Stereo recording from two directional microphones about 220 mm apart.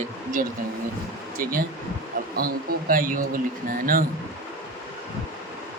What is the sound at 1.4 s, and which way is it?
Speech, 40° right (ahead or behind).